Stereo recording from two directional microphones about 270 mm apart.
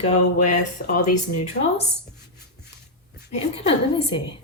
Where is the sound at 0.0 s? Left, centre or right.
Left.